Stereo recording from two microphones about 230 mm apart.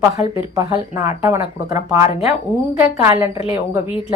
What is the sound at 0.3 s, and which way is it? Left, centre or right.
Speech, centre.